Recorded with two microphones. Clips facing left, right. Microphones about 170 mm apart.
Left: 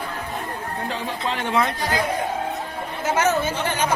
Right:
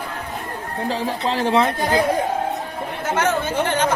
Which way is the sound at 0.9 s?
35° right (ahead or behind).